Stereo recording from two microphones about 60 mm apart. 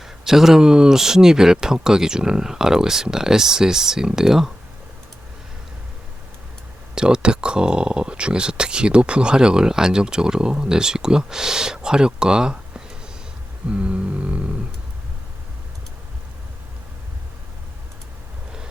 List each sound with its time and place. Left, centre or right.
0.0 s speech: centre
6.9 s speech: centre
13.7 s a sound: centre